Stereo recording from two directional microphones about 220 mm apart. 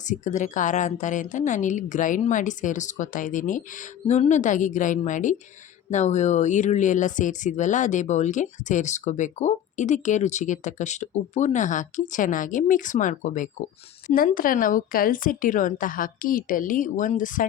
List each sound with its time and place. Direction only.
0.0 s speech: 35° left (ahead or behind)